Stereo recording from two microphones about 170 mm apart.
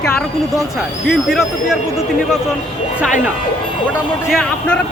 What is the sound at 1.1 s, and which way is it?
Speech, centre (ahead or behind).